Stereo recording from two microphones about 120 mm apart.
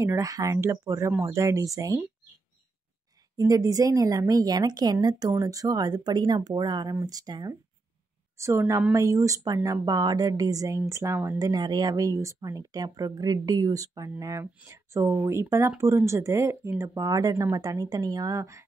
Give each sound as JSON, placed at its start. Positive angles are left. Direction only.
{"t": 0.0, "sound": "speech", "side_deg": -25}
{"t": 3.3, "sound": "a woman's voice", "side_deg": -30}